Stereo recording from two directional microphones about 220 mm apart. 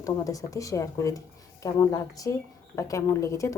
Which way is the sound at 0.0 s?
15° left (ahead or behind).